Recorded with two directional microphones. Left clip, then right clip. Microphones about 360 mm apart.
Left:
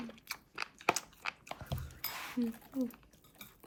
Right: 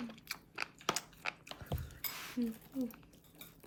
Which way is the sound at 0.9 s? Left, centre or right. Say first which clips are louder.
Left 1 dB; centre.